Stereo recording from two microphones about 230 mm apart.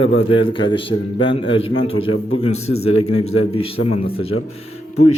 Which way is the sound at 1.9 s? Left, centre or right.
Left.